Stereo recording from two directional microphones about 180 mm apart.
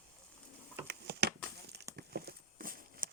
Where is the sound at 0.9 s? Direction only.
65° right (ahead or behind).